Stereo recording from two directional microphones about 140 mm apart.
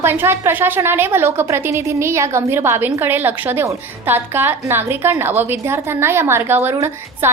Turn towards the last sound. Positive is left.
turn(degrees=-15)  # may be behind; listen again after turning